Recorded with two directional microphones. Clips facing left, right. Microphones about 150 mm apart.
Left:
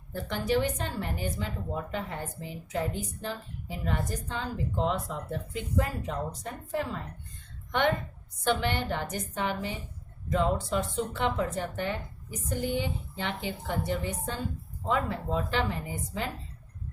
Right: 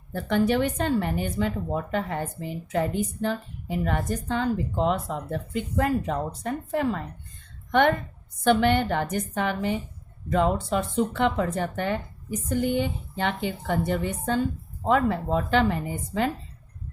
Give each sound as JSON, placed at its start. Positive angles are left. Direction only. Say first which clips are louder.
{"t": 0.1, "sound": "speech", "louder": "right 5 dB", "side_deg": -60}